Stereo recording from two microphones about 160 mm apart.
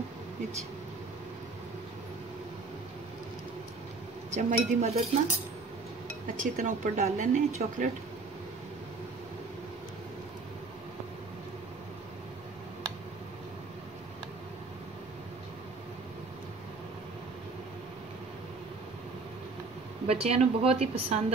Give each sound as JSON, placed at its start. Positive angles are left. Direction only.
{"t": 4.3, "sound": "speech", "side_deg": -55}
{"t": 4.8, "sound": "a woman's voice", "side_deg": -40}
{"t": 6.4, "sound": "speech", "side_deg": -50}
{"t": 20.1, "sound": "a woman's voice", "side_deg": -40}